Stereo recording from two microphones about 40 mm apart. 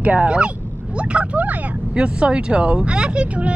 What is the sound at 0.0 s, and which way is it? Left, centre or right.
Speech, right.